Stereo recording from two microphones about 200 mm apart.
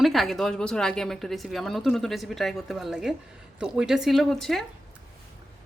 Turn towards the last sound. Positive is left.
turn(degrees=0)  # may be behind; listen again after turning